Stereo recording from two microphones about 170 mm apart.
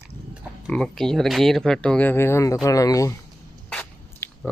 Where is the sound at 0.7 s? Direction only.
5° left (ahead or behind).